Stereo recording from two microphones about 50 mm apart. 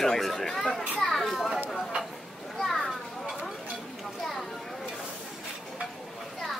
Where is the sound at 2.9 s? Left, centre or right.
Centre.